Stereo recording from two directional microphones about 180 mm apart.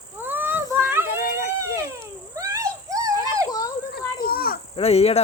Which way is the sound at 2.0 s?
15° right (ahead or behind).